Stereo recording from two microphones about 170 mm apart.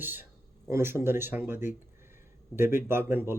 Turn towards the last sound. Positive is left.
turn(degrees=-15)  # may be behind; listen again after turning